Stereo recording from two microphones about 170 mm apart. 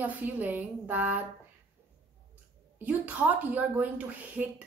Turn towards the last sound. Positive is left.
turn(degrees=-10)  # may be behind; listen again after turning